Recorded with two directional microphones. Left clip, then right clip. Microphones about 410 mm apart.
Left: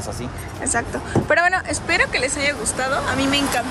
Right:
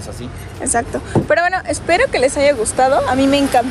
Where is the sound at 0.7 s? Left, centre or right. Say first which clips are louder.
Right 5 dB; centre.